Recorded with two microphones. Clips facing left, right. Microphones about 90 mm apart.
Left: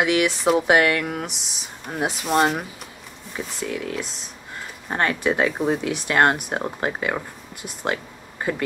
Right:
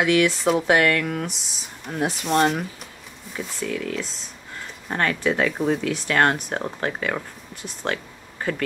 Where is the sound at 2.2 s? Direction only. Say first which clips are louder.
Even; 5° left (ahead or behind).